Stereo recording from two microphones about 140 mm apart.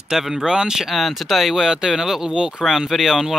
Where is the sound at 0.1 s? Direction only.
Centre (ahead or behind).